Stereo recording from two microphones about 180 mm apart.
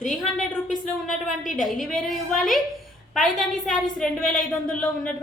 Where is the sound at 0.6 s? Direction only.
45° left (ahead or behind).